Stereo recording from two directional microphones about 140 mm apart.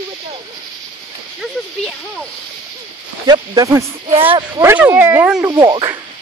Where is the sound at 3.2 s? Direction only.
30° right (ahead or behind).